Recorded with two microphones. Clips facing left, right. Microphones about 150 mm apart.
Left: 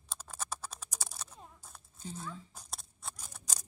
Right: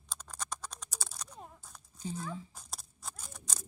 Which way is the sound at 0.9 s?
20° left (ahead or behind).